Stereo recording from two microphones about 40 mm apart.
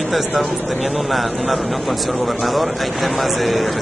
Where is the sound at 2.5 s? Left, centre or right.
Centre.